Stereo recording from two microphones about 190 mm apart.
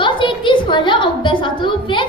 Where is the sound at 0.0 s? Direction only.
25° left (ahead or behind).